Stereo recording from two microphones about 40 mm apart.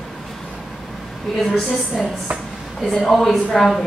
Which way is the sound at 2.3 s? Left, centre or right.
Right.